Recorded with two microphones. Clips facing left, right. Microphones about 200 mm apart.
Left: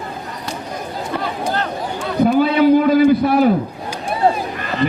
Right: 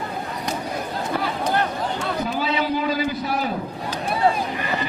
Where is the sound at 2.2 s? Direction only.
55° left (ahead or behind).